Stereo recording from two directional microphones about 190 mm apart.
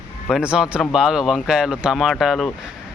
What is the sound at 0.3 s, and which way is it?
Speech, 5° right (ahead or behind).